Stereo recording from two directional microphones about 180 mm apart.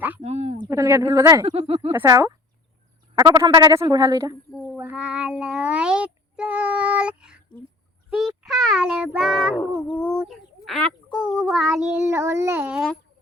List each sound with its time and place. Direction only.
0.2 s a sound: 35° right (ahead or behind)
0.7 s child singing: 15° right (ahead or behind)
1.5 s speech: 35° right (ahead or behind)
1.9 s child singing: 15° right (ahead or behind)
3.2 s speech: 20° right (ahead or behind)
4.8 s child singing: 10° right (ahead or behind)
8.1 s speech: centre (ahead or behind)
8.6 s child singing: 5° right (ahead or behind)
10.0 s speech: 5° left (ahead or behind)
11.5 s child singing: 5° right (ahead or behind)
12.3 s child singing: 15° right (ahead or behind)